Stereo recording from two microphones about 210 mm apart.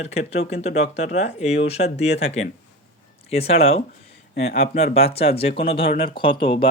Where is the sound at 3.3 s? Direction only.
30° left (ahead or behind).